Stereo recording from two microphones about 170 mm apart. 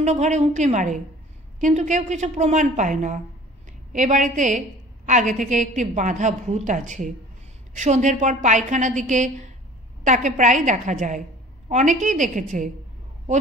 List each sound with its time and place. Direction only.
0.0 s a woman's voice: 45° right (ahead or behind)